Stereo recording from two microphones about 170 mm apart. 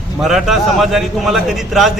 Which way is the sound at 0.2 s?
Centre (ahead or behind).